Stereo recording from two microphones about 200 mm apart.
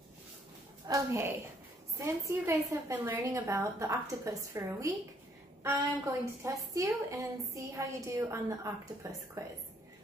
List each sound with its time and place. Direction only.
0.8 s a woman's voice: 15° right (ahead or behind)